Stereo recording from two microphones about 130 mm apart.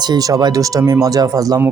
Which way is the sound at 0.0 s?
30° right (ahead or behind).